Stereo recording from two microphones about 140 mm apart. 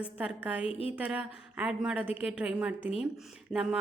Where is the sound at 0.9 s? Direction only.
10° right (ahead or behind).